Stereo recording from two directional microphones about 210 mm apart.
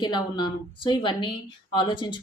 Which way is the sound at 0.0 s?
20° left (ahead or behind).